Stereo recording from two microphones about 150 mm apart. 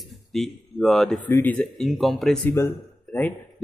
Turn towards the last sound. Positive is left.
turn(degrees=10)  # may be behind; listen again after turning